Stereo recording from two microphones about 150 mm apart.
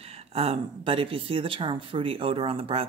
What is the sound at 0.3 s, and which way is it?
Speech, 40° right (ahead or behind).